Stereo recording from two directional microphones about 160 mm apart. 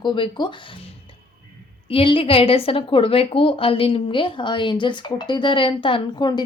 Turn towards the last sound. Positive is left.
turn(degrees=30)  # may be behind; listen again after turning